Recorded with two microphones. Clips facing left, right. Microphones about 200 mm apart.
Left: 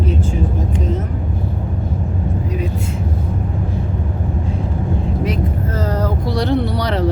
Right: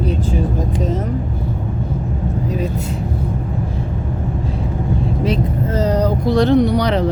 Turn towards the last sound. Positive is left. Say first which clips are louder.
# right 4 dB
turn(degrees=-20)  # may be behind; listen again after turning